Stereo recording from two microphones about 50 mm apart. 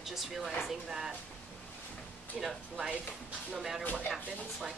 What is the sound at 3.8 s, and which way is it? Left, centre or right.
Speech, left.